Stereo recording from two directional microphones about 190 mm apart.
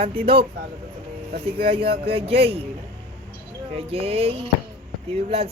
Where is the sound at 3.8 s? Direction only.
30° right (ahead or behind).